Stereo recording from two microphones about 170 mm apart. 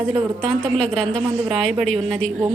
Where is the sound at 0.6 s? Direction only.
5° left (ahead or behind).